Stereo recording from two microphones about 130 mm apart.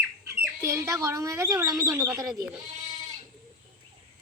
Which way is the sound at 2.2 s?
25° right (ahead or behind).